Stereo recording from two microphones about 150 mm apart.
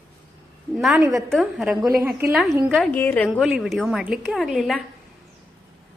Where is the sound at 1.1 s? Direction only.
Centre (ahead or behind).